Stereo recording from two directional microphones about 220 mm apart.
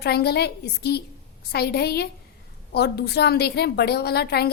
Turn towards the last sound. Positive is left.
turn(degrees=45)  # may be behind; listen again after turning